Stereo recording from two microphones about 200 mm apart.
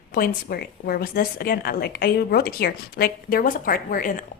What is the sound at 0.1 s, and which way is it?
A woman's voice, 50° left (ahead or behind).